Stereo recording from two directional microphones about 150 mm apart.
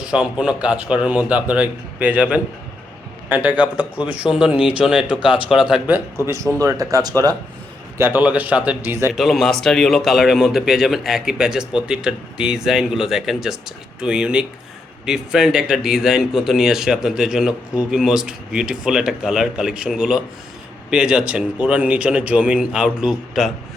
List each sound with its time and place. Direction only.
0.0 s speech: 5° right (ahead or behind)
5.1 s speech: 35° left (ahead or behind)
5.7 s speech: 15° right (ahead or behind)
9.1 s speech: centre (ahead or behind)